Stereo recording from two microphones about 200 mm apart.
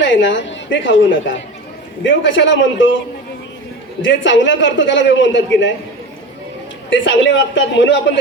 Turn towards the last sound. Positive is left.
turn(degrees=65)  # may be behind; listen again after turning